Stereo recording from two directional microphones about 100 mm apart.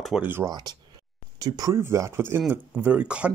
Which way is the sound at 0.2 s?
20° right (ahead or behind).